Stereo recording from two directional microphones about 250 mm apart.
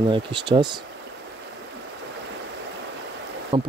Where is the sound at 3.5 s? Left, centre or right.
Centre.